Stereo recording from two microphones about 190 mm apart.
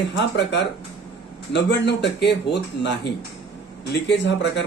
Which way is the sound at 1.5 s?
65° left (ahead or behind).